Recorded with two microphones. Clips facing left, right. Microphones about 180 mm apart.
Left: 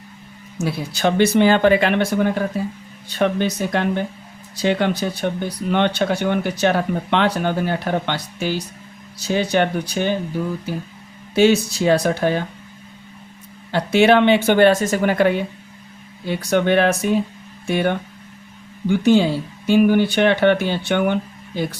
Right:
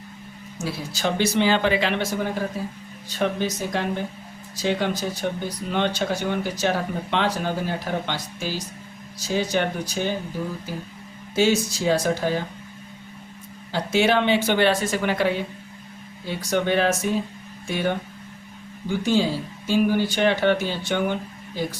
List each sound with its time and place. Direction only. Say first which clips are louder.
0.6 s speech: left 6 dB; 60° left (ahead or behind)
11.3 s speech: left 5 dB; 65° left (ahead or behind)
13.7 s speech: left 6 dB; 65° left (ahead or behind); by 15.3 s 50° left (ahead or behind)
16.4 s speech: left 5 dB; 60° left (ahead or behind)